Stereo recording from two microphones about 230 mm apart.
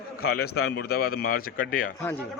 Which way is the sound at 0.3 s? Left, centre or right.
Left.